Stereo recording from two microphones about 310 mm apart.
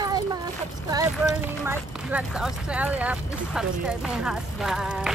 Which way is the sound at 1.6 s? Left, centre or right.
Centre.